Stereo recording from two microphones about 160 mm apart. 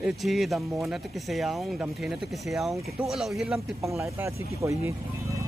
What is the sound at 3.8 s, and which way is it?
Speech, 20° right (ahead or behind).